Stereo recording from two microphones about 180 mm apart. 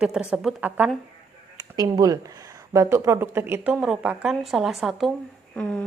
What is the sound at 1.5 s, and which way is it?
A woman's voice, 20° right (ahead or behind).